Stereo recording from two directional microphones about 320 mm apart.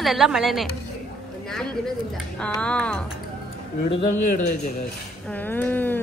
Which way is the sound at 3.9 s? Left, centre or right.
Left.